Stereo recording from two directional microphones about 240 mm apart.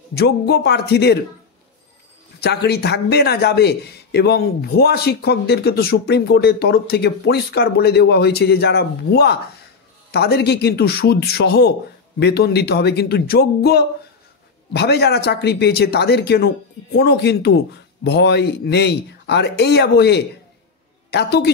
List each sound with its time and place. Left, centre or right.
0.1 s a man's voice: left
2.4 s a man's voice: left